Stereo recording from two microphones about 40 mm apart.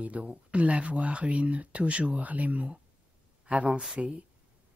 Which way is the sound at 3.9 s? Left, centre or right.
Centre.